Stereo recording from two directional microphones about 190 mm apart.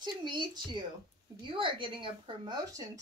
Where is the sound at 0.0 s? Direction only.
25° right (ahead or behind).